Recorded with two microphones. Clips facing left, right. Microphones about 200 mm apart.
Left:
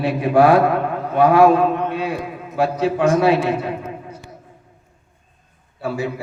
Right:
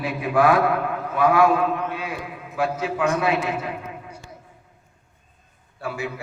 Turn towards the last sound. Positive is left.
turn(degrees=35)  # may be behind; listen again after turning